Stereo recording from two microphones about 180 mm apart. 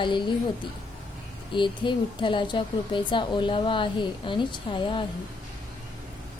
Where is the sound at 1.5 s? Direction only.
25° left (ahead or behind).